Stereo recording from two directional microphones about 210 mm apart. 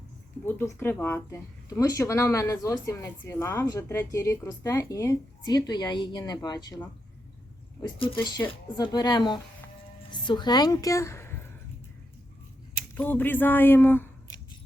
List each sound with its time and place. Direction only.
0.4 s a woman's voice: 10° left (ahead or behind)
13.0 s speech: 10° left (ahead or behind)